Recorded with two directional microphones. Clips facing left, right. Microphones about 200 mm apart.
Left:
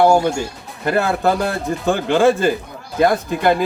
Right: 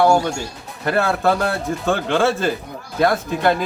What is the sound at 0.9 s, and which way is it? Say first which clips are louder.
Speech: left 1 dB; 5° left (ahead or behind).